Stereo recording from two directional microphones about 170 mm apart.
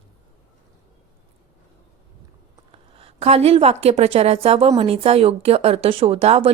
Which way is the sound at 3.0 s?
35° right (ahead or behind).